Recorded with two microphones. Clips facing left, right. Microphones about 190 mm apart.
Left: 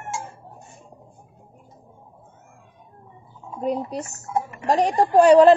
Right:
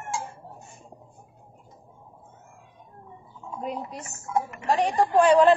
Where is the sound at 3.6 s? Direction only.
35° left (ahead or behind).